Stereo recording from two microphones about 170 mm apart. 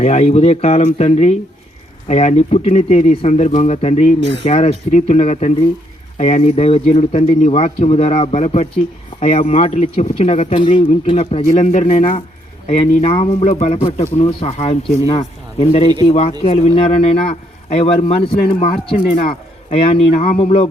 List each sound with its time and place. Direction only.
0.0 s speech: 40° left (ahead or behind)